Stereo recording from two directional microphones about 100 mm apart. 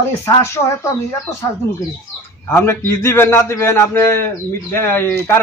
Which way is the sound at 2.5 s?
25° left (ahead or behind).